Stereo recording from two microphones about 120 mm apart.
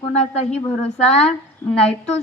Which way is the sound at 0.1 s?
65° left (ahead or behind).